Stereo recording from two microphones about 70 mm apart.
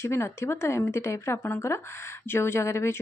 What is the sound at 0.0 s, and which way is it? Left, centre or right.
Speech, left.